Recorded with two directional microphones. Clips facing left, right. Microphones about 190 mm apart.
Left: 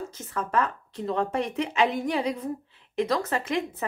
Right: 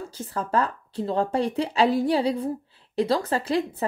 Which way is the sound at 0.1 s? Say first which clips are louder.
Right 4 dB; 30° right (ahead or behind).